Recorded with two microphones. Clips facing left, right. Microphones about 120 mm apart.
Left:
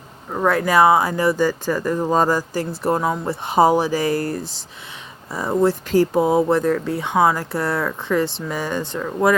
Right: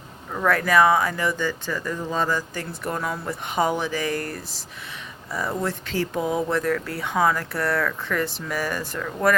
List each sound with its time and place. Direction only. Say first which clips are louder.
0.3 s speech: left 3 dB; 25° left (ahead or behind)
5.9 s speech: left 7 dB; 40° left (ahead or behind); by 9.3 s 20° left (ahead or behind)